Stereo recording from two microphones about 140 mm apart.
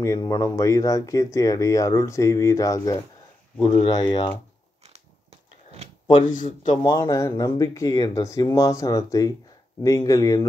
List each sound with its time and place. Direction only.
0.0 s speech: 25° left (ahead or behind)
3.8 s speech: 35° left (ahead or behind)
4.8 s biting: 50° right (ahead or behind)
6.2 s speech: 70° left (ahead or behind)
6.8 s speech: 25° left (ahead or behind)